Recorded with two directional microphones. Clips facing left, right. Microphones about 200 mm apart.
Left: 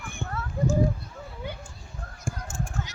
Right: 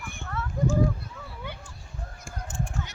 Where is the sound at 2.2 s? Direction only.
50° left (ahead or behind).